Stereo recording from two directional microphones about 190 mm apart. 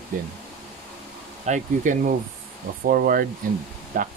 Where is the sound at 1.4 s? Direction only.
40° right (ahead or behind).